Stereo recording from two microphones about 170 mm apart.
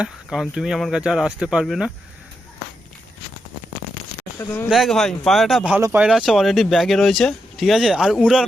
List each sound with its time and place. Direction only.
0.0 s speech: 5° right (ahead or behind)
4.7 s speech: centre (ahead or behind)
5.7 s speech: 10° right (ahead or behind)